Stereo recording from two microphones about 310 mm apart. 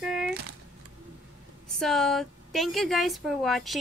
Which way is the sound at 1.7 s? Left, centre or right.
Centre.